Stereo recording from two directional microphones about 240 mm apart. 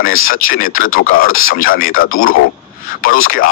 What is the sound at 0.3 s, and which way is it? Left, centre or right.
A man's voice, left.